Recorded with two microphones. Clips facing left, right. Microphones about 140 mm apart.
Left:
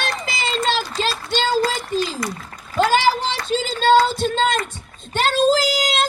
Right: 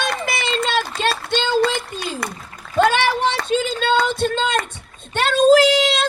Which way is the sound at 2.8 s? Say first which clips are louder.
Even; 60° right (ahead or behind).